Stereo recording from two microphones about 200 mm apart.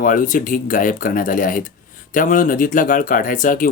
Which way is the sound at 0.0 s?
40° left (ahead or behind).